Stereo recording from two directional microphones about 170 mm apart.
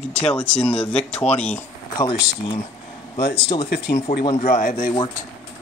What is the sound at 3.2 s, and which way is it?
Speech, 70° left (ahead or behind).